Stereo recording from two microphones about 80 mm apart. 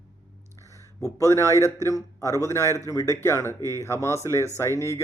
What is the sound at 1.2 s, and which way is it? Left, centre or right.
Speech, left.